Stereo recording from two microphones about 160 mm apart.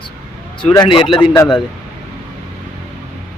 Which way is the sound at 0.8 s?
30° left (ahead or behind).